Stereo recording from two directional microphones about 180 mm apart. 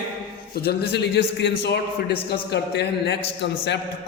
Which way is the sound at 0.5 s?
60° left (ahead or behind).